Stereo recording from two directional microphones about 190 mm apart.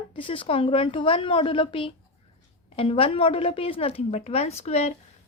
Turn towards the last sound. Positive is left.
turn(degrees=35)  # may be behind; listen again after turning